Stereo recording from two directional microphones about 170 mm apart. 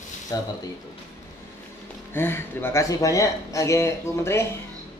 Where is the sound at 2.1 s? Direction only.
15° left (ahead or behind).